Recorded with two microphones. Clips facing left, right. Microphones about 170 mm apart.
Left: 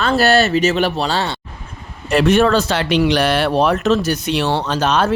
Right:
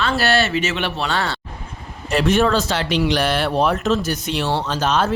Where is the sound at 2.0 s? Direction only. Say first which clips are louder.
Left 4 dB; 60° left (ahead or behind).